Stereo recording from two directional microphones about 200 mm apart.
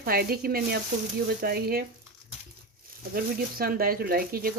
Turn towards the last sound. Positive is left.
turn(degrees=-45)  # may be behind; listen again after turning